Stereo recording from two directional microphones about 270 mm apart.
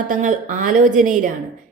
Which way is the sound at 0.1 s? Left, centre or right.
Right.